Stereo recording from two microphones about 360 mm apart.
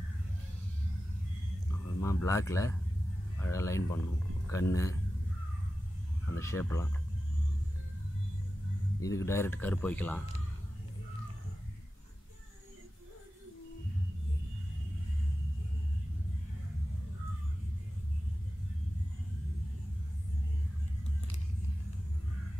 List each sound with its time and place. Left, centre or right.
2.0 s speech: centre
6.4 s speech: centre
9.0 s speech: centre